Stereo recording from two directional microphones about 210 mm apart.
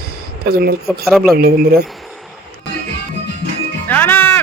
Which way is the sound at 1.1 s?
Centre (ahead or behind).